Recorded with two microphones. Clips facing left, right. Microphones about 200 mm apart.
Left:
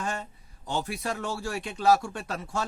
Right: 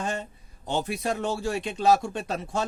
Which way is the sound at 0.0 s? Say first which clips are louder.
Right 3 dB; 20° right (ahead or behind).